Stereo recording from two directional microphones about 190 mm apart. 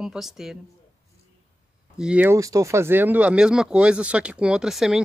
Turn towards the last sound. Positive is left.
turn(degrees=0)  # may be behind; listen again after turning